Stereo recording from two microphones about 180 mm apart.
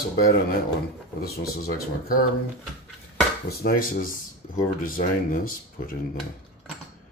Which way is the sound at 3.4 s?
55° left (ahead or behind).